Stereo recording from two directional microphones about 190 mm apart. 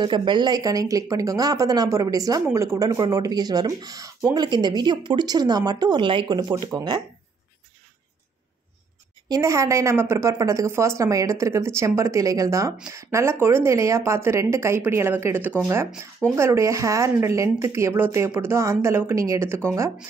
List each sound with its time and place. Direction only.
0.0 s speech: 25° right (ahead or behind)
9.3 s speech: 15° right (ahead or behind)